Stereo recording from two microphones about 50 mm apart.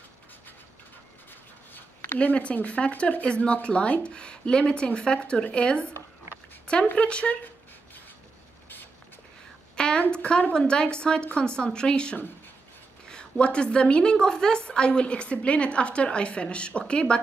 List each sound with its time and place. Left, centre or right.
2.1 s a woman's voice: left
7.0 s a woman's voice: left
9.8 s a sound: centre
10.5 s a woman's voice: centre